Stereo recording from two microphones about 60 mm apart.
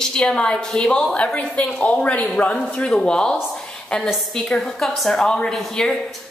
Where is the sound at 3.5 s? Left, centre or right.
Centre.